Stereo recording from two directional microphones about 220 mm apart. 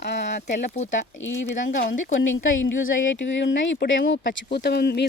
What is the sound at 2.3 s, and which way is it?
Speech, 60° left (ahead or behind).